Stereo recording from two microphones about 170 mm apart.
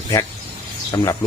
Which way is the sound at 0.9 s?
20° left (ahead or behind).